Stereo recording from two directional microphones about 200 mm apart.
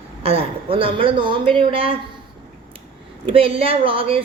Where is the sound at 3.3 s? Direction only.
25° right (ahead or behind).